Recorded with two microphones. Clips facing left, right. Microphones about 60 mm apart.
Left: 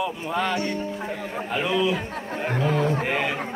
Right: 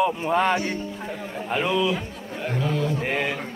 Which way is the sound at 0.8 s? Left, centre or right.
Centre.